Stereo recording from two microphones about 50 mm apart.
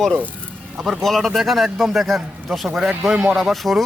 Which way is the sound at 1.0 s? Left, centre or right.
Centre.